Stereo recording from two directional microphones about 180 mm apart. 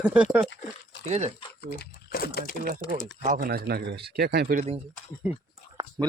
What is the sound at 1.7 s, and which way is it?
Speech, 60° left (ahead or behind).